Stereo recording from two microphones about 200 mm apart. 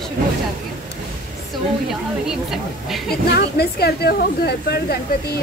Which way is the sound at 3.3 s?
50° left (ahead or behind).